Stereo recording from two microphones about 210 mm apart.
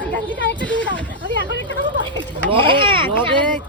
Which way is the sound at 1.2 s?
60° left (ahead or behind).